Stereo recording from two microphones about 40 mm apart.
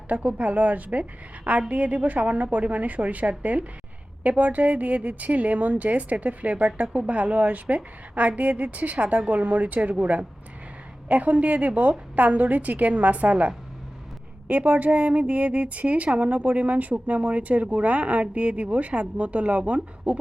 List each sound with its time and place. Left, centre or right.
0.1 s speech: right